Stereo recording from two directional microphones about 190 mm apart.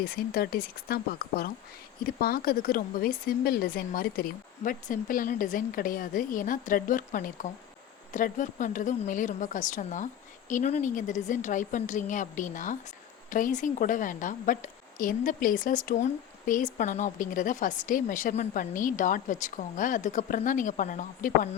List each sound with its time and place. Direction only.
0.0 s a woman's voice: 50° left (ahead or behind)